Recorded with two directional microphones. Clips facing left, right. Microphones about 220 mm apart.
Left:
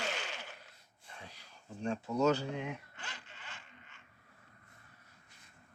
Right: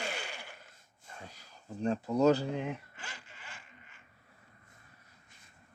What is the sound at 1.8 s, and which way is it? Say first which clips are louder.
Speech: right 4 dB; 40° right (ahead or behind).